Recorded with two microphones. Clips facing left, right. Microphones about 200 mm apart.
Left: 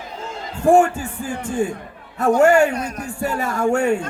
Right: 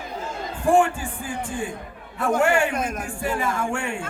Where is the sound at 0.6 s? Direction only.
45° left (ahead or behind).